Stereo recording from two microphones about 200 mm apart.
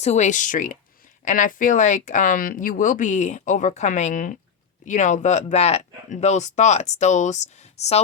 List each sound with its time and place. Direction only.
0.0 s speech: 35° left (ahead or behind)